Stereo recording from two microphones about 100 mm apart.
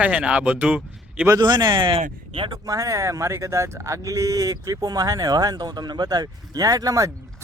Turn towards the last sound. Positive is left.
turn(degrees=-35)  # may be behind; listen again after turning